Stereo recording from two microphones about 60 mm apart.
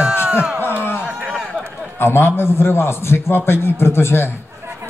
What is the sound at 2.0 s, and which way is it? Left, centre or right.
A man's voice, left.